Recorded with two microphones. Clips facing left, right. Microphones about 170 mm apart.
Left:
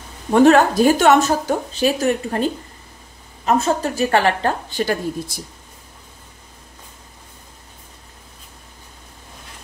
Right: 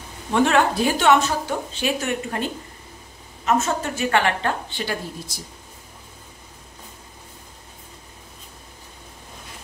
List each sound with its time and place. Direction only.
0.3 s a woman's voice: 40° left (ahead or behind)